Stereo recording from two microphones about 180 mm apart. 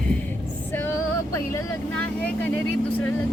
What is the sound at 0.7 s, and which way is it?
Female singing, 10° left (ahead or behind).